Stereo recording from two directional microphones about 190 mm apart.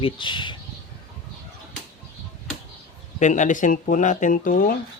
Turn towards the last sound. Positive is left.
turn(degrees=45)  # may be behind; listen again after turning